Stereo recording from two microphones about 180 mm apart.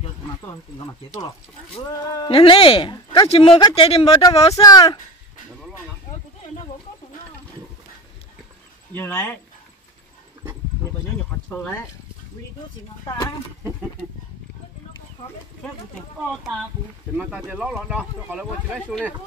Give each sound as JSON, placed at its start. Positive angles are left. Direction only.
{"t": 0.5, "sound": "speech", "side_deg": 20}
{"t": 4.6, "sound": "speech", "side_deg": 20}
{"t": 8.9, "sound": "speech", "side_deg": 10}
{"t": 17.2, "sound": "speech", "side_deg": -10}